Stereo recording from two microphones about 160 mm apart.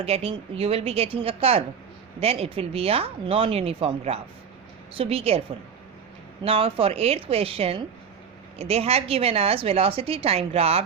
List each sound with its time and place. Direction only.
0.0 s a woman's voice: 40° right (ahead or behind)
6.4 s a woman's voice: 35° right (ahead or behind)